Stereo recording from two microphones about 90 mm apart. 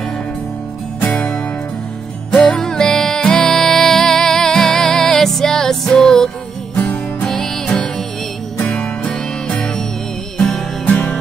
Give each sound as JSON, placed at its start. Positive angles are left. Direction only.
{"t": 1.0, "sound": "music", "side_deg": 15}
{"t": 2.3, "sound": "music", "side_deg": 5}
{"t": 6.8, "sound": "music", "side_deg": 20}